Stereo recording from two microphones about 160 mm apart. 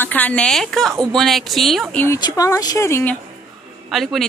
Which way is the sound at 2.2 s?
20° left (ahead or behind).